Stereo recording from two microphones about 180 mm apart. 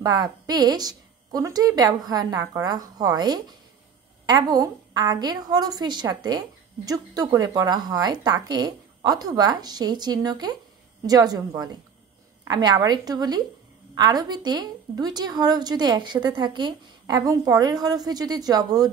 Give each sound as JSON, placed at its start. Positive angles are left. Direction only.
{"t": 0.0, "sound": "a woman's voice", "side_deg": -20}